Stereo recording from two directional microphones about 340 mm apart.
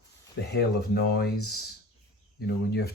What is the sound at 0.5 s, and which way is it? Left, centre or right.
Speech, left.